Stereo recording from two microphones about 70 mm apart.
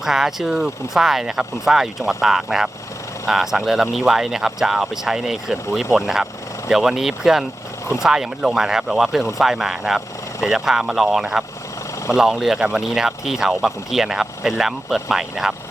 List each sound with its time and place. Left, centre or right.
0.0 s speech: centre